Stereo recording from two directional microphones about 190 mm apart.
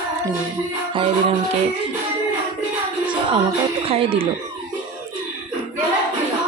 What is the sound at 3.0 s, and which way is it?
Music, 25° right (ahead or behind).